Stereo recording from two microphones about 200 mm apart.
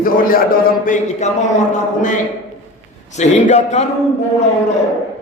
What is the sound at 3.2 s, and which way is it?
Speech, 35° left (ahead or behind).